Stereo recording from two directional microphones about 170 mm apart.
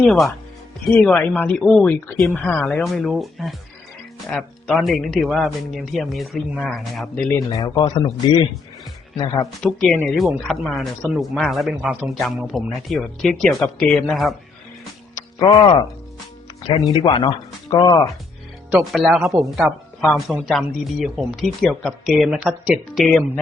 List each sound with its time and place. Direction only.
0.0 s speech: centre (ahead or behind)
7.3 s speech: 20° left (ahead or behind)
9.1 s speech: 25° left (ahead or behind)
9.6 s speech: 5° left (ahead or behind)
15.1 s speech: 25° left (ahead or behind)
18.9 s speech: 5° right (ahead or behind)